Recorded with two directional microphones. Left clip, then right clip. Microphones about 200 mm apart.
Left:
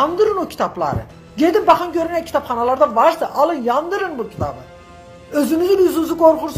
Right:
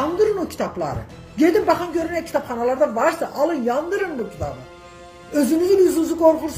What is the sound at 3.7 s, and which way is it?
Speech, 15° right (ahead or behind).